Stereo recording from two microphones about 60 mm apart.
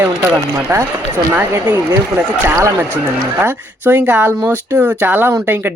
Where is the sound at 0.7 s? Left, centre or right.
Right.